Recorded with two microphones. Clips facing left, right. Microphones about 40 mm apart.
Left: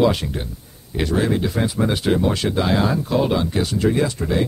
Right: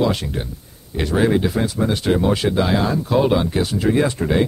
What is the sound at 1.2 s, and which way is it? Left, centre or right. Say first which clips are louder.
Speech: right 5 dB; centre.